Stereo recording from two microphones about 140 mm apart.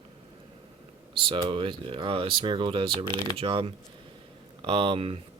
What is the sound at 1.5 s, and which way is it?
Speech, 40° right (ahead or behind).